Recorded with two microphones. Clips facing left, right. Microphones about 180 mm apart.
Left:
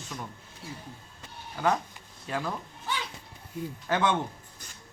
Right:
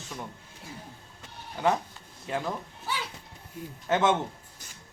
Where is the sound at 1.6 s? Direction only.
20° right (ahead or behind).